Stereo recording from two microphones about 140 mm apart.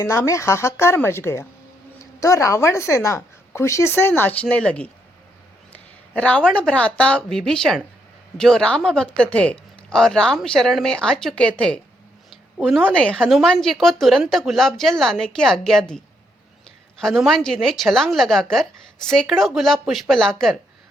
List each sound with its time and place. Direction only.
0.0 s a woman's voice: 20° left (ahead or behind); by 20.5 s 5° left (ahead or behind)